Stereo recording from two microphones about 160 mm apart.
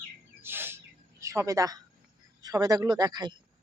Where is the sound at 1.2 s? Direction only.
20° right (ahead or behind).